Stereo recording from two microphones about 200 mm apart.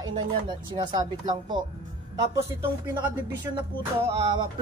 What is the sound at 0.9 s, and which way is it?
Speech, 20° right (ahead or behind).